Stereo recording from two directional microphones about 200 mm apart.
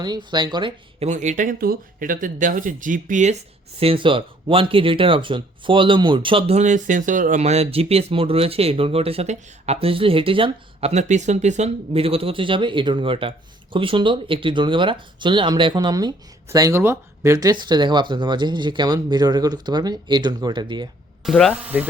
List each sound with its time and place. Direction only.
0.3 s speech: 20° right (ahead or behind); by 3.3 s 40° right (ahead or behind)
3.8 s speech: 25° right (ahead or behind)
21.2 s speech: centre (ahead or behind)